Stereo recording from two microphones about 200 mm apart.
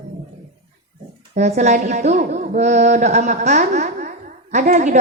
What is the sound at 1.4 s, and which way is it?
A woman's voice, 35° right (ahead or behind).